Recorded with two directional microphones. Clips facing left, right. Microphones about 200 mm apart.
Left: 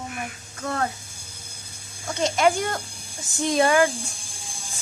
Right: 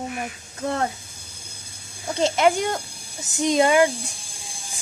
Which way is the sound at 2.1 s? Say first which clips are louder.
Right 2 dB; 25° right (ahead or behind).